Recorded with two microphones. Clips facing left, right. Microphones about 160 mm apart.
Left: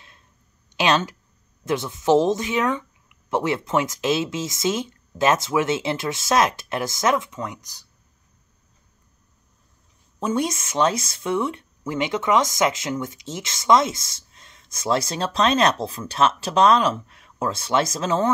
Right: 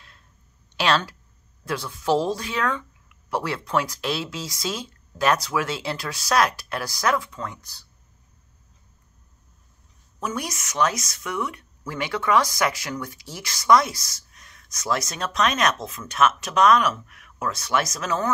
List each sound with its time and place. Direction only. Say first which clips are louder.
0.7 s speech: left 2 dB; 20° left (ahead or behind)
10.2 s speech: left 7 dB; 25° left (ahead or behind)